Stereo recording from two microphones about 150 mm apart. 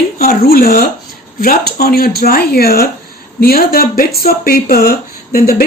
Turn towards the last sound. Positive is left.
turn(degrees=75)  # may be behind; listen again after turning